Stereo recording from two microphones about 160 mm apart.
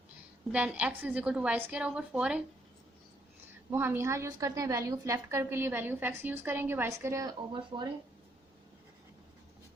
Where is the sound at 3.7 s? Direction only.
15° right (ahead or behind); by 7.9 s 30° right (ahead or behind).